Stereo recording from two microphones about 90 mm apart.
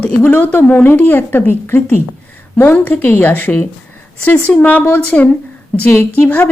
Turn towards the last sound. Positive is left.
turn(degrees=25)  # may be behind; listen again after turning